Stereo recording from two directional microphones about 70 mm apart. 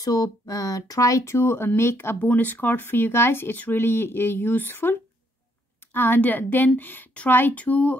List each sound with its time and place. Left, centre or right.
0.0 s speech: left
2.1 s speech: left
5.9 s speech: left